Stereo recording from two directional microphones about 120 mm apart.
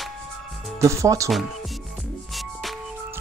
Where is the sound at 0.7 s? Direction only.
25° right (ahead or behind).